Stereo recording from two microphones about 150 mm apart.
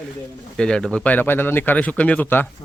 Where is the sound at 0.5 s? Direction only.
5° left (ahead or behind).